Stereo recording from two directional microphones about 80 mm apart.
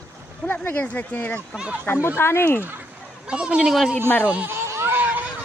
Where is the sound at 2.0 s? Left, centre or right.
Left.